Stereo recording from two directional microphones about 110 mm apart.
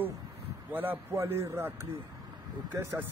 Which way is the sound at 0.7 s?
15° right (ahead or behind).